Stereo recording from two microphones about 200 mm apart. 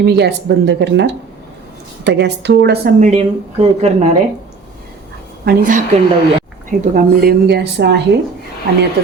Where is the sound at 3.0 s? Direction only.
30° right (ahead or behind).